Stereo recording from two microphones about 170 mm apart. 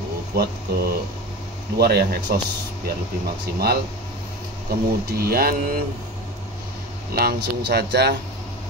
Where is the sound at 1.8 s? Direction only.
65° right (ahead or behind).